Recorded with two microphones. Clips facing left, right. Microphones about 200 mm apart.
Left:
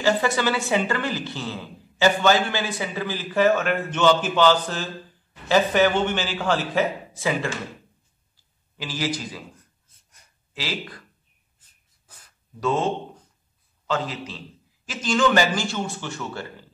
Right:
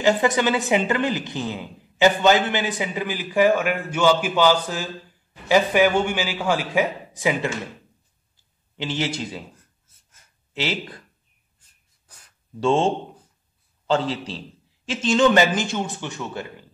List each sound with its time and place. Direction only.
0.0 s a woman's voice: 20° right (ahead or behind)
8.7 s a man's voice: 25° right (ahead or behind)
10.5 s a man's voice: 25° right (ahead or behind)
12.5 s a man's voice: 30° right (ahead or behind)